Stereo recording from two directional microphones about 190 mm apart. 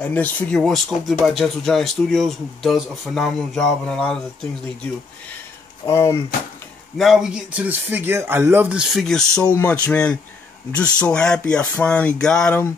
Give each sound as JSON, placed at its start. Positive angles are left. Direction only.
{"t": 0.0, "sound": "speech", "side_deg": 5}
{"t": 5.9, "sound": "speech", "side_deg": 15}
{"t": 7.0, "sound": "speech", "side_deg": 0}